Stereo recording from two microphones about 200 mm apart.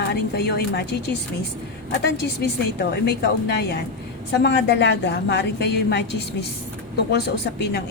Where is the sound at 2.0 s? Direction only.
55° left (ahead or behind).